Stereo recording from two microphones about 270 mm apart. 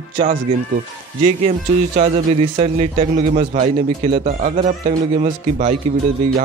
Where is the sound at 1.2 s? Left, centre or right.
Right.